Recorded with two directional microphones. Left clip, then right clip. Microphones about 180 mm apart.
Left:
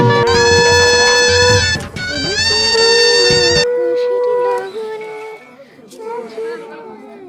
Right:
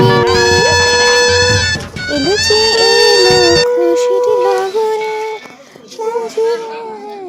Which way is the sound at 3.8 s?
40° right (ahead or behind).